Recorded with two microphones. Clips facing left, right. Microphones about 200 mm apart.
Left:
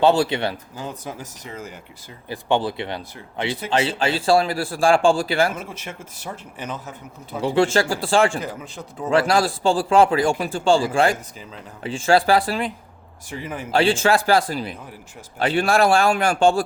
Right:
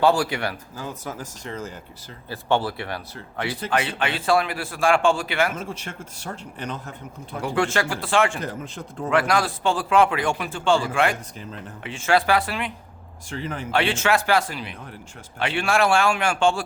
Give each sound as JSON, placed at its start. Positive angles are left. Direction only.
{"t": 0.0, "sound": "speech", "side_deg": 25}
{"t": 5.5, "sound": "a man's voice", "side_deg": 5}
{"t": 7.3, "sound": "speech", "side_deg": 25}
{"t": 8.6, "sound": "a man's voice", "side_deg": 0}
{"t": 9.0, "sound": "speech", "side_deg": 30}
{"t": 13.3, "sound": "speech", "side_deg": 10}
{"t": 13.7, "sound": "speech", "side_deg": 30}